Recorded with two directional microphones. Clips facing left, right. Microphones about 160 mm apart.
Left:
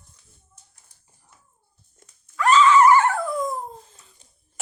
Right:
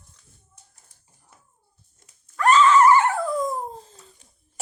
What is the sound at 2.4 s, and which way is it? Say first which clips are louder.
Dog: even; 45° right (ahead or behind).